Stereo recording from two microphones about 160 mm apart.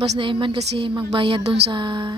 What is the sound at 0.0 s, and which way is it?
A woman's voice, 35° right (ahead or behind).